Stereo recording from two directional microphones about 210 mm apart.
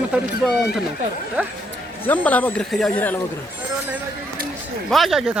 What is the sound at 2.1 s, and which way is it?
Speech, 5° left (ahead or behind).